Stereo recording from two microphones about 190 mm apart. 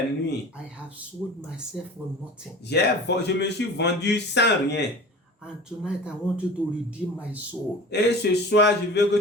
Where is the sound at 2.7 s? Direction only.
60° left (ahead or behind).